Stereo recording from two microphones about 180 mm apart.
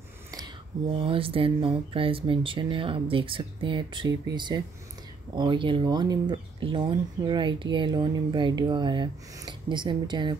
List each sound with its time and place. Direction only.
0.9 s speech: 30° right (ahead or behind)